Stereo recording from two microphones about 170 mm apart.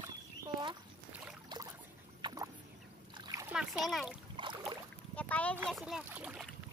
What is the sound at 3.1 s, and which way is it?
Splash, 25° right (ahead or behind).